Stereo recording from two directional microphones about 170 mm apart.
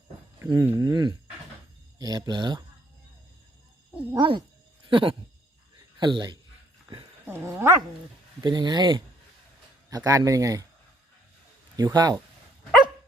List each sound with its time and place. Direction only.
0.3 s a sound: 25° right (ahead or behind)
0.6 s speech: 15° right (ahead or behind)
4.1 s speech: 25° right (ahead or behind)
7.3 s speech: 15° right (ahead or behind)
8.4 s speech: 25° right (ahead or behind)
11.8 s speech: 20° right (ahead or behind)